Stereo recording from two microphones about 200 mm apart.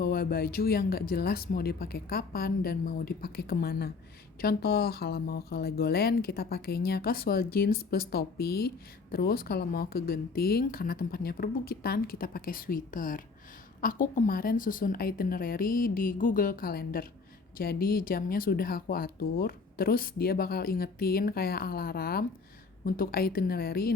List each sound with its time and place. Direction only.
0.0 s speech: 45° left (ahead or behind)